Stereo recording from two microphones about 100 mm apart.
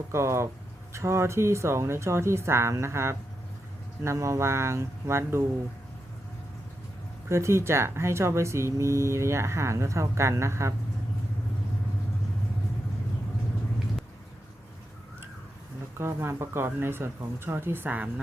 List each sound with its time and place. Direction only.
0.1 s speech: 30° right (ahead or behind)
7.3 s speech: 30° right (ahead or behind)
16.0 s speech: 25° right (ahead or behind)